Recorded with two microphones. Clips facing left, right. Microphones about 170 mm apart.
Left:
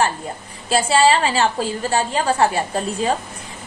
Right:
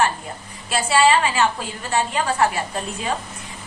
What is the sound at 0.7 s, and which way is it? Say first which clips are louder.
A woman's voice: left 2 dB; 30° left (ahead or behind).